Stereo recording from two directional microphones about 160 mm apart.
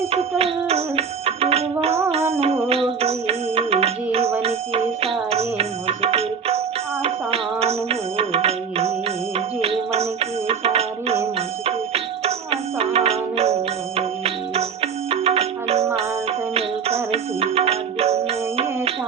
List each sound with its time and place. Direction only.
0.1 s music: 40° right (ahead or behind)